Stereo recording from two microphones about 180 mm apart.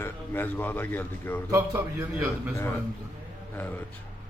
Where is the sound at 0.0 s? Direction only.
10° left (ahead or behind).